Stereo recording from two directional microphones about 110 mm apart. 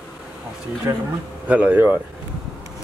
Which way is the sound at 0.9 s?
25° right (ahead or behind).